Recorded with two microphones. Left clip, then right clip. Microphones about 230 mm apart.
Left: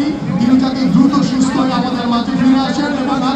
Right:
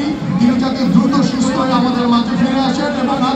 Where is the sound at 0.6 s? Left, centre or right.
Left.